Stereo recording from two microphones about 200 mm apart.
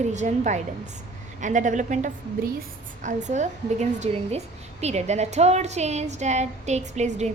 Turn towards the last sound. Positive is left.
turn(degrees=-35)  # may be behind; listen again after turning